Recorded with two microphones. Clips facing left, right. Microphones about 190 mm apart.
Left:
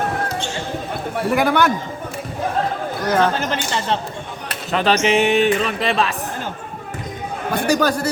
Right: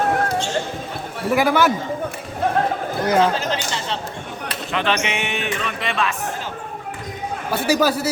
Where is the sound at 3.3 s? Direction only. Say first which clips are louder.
Left 2 dB; 60° left (ahead or behind).